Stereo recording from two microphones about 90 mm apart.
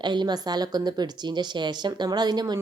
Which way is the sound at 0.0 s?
55° right (ahead or behind).